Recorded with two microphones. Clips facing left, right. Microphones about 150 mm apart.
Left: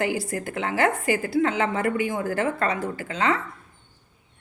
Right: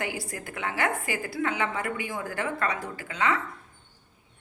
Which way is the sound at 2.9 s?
30° left (ahead or behind).